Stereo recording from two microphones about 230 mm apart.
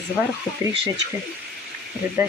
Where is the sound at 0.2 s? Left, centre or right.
Centre.